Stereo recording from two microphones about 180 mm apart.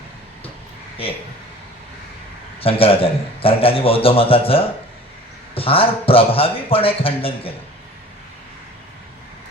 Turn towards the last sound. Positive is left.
turn(degrees=30)  # may be behind; listen again after turning